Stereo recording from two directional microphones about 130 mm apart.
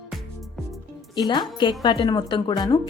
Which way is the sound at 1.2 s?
35° left (ahead or behind).